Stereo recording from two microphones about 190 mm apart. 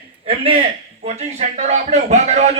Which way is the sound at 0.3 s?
30° right (ahead or behind).